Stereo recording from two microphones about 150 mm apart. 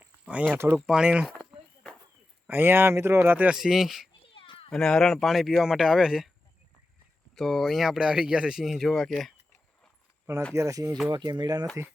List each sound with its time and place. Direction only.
0.0 s speech: 10° right (ahead or behind)
2.5 s speech: 15° right (ahead or behind)
4.3 s a sound: 35° left (ahead or behind)
4.7 s speech: 5° left (ahead or behind)
7.3 s speech: centre (ahead or behind)
10.5 s speech: 20° right (ahead or behind)